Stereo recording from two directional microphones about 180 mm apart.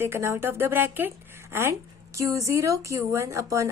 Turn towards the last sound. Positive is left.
turn(degrees=-15)  # may be behind; listen again after turning